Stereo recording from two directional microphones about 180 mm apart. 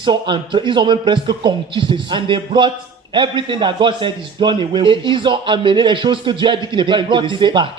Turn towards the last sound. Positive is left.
turn(degrees=-25)  # may be behind; listen again after turning